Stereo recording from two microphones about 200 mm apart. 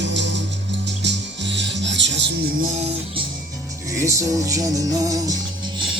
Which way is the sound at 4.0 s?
15° right (ahead or behind).